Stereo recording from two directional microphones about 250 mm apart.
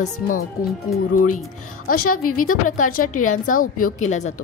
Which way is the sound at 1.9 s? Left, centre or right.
Left.